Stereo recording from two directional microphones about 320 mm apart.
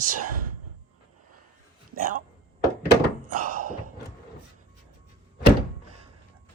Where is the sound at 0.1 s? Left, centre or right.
Right.